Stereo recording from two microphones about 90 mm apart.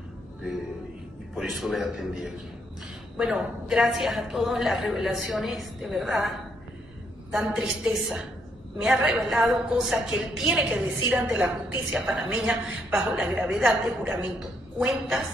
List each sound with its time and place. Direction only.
1.3 s a woman's voice: 5° right (ahead or behind)
11.9 s a woman's voice: 5° right (ahead or behind)
13.3 s a woman's voice: 20° right (ahead or behind)